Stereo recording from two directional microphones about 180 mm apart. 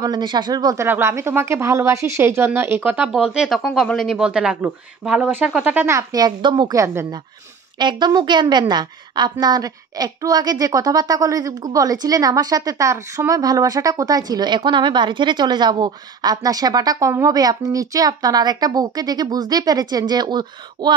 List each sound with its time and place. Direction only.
0.0 s a woman's voice: 25° right (ahead or behind)